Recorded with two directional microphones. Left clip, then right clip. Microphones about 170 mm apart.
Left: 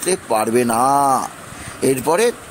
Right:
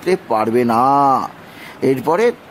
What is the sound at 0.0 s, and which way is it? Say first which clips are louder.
A man's voice: right 2 dB; 5° right (ahead or behind).